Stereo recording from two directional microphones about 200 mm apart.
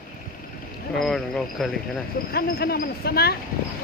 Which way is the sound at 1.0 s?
Centre (ahead or behind).